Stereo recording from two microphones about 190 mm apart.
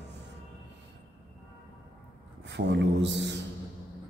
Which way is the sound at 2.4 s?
65° right (ahead or behind).